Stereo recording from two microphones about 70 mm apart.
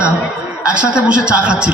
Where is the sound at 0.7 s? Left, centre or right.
Centre.